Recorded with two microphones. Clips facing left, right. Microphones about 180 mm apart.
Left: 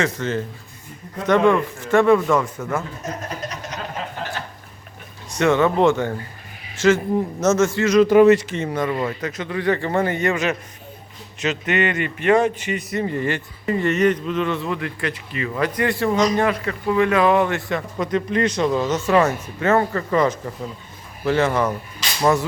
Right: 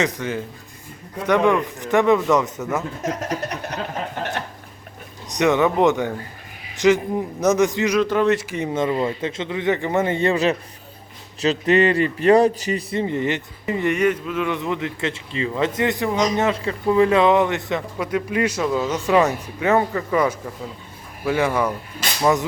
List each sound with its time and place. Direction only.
0.0 s a man's voice: 10° right (ahead or behind)
3.0 s a sound: 85° right; by 3.8 s 60° right (ahead or behind)
5.4 s a man's voice: 15° right (ahead or behind)
8.0 s speech: 10° left (ahead or behind)
8.4 s a man's voice: 10° right (ahead or behind)